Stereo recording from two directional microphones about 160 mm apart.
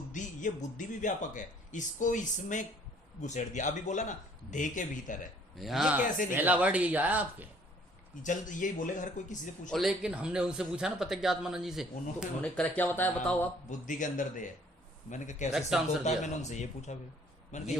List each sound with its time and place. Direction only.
0.1 s speech: 50° left (ahead or behind)
5.5 s speech: centre (ahead or behind)
8.2 s speech: 55° left (ahead or behind)
9.6 s speech: centre (ahead or behind)
12.4 s speech: 10° left (ahead or behind)
13.7 s speech: 50° left (ahead or behind)